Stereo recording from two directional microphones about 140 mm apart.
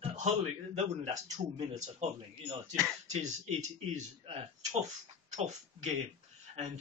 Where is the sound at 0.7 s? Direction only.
55° right (ahead or behind).